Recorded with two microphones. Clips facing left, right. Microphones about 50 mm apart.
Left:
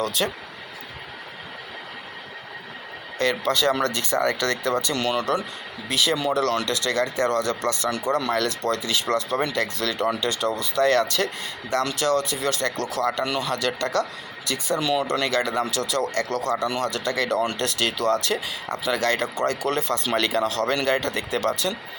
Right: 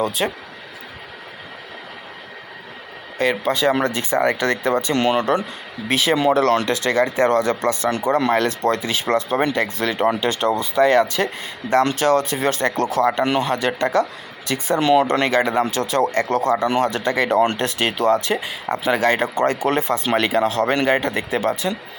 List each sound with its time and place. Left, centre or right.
0.0 s speech: centre
3.2 s speech: centre; by 10.7 s right
10.8 s speech: centre
11.7 s speech: right
14.4 s speech: right
15.3 s speech: right